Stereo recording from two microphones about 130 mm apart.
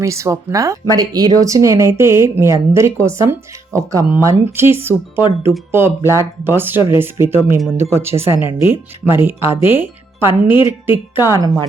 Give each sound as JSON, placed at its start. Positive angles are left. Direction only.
{"t": 0.0, "sound": "speech", "side_deg": -25}